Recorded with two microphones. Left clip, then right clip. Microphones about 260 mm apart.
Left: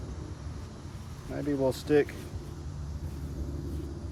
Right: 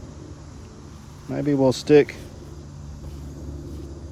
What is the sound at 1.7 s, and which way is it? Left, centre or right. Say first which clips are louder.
Speech: right 11 dB; right.